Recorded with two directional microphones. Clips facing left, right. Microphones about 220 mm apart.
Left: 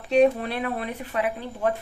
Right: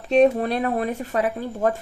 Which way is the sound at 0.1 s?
40° right (ahead or behind).